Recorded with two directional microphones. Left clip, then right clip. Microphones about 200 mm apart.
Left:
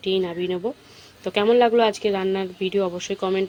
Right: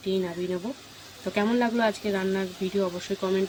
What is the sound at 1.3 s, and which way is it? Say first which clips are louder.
Speech: left 9 dB; 15° left (ahead or behind).